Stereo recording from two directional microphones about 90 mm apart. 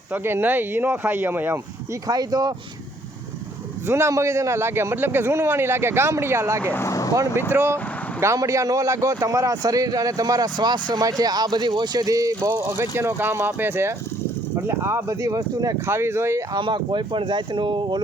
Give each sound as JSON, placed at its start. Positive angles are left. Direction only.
{"t": 0.1, "sound": "a man's voice", "side_deg": -25}
{"t": 2.0, "sound": "speech", "side_deg": -45}
{"t": 3.8, "sound": "a man's voice", "side_deg": -30}
{"t": 6.8, "sound": "speech", "side_deg": 40}
{"t": 7.5, "sound": "a man's voice", "side_deg": -25}
{"t": 15.9, "sound": "a man's voice", "side_deg": -30}
{"t": 16.6, "sound": "speech", "side_deg": -60}